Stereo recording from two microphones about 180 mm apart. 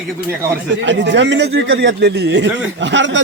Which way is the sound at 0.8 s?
85° right.